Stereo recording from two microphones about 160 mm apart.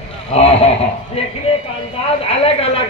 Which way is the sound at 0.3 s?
40° left (ahead or behind).